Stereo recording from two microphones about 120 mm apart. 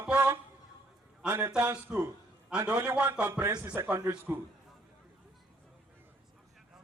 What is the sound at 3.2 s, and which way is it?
A man's voice, 20° right (ahead or behind).